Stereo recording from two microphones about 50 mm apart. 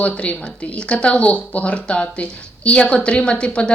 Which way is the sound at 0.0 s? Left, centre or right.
Left.